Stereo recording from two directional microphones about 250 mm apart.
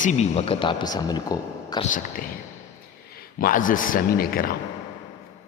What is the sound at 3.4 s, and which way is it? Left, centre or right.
A man's voice, left.